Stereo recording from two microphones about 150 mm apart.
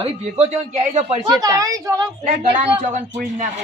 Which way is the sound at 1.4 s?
25° right (ahead or behind).